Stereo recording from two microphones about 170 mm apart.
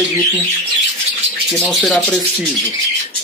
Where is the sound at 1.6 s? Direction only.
Centre (ahead or behind).